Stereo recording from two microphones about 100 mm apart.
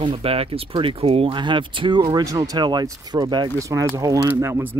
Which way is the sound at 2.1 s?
35° right (ahead or behind).